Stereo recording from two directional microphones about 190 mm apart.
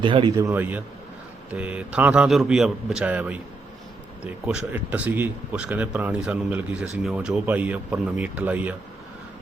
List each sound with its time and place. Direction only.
0.0 s speech: 25° right (ahead or behind); by 8.7 s 10° right (ahead or behind)